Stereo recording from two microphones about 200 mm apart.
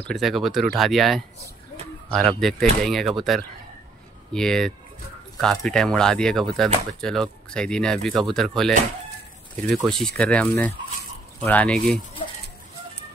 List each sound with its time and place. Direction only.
0.0 s speech: centre (ahead or behind)
9.8 s speech: 5° left (ahead or behind)
12.2 s a sound: 30° left (ahead or behind)